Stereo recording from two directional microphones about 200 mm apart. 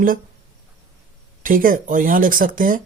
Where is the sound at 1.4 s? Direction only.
45° right (ahead or behind).